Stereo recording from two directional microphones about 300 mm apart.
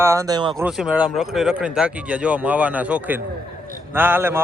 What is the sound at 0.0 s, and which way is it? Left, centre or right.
Speech, centre.